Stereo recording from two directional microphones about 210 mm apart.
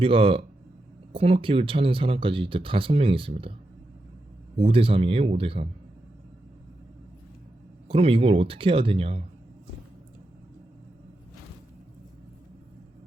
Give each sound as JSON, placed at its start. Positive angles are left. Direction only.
{"t": 0.0, "sound": "speech", "side_deg": -25}
{"t": 4.5, "sound": "speech", "side_deg": -25}
{"t": 7.9, "sound": "speech", "side_deg": -25}